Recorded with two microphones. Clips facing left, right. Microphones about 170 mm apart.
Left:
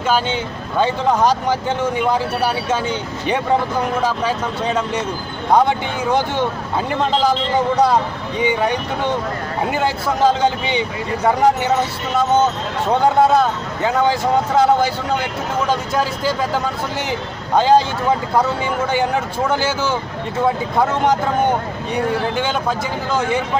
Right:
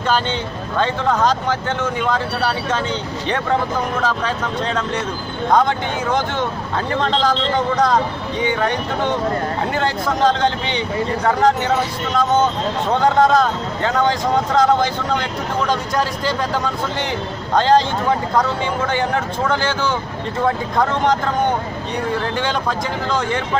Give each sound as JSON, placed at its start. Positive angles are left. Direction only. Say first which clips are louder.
{"t": 0.1, "sound": "speech", "louder": "left 1 dB", "side_deg": 10}
{"t": 9.8, "sound": "speech", "louder": "left 1 dB", "side_deg": 5}
{"t": 17.6, "sound": "speech", "louder": "left 1 dB", "side_deg": 5}
{"t": 22.4, "sound": "speech", "louder": "left 1 dB", "side_deg": 5}